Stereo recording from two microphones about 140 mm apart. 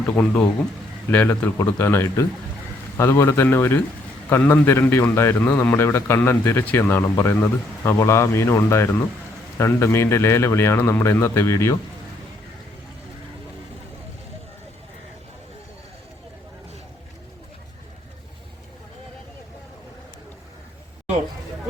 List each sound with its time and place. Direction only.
0.1 s a man's voice: 15° left (ahead or behind)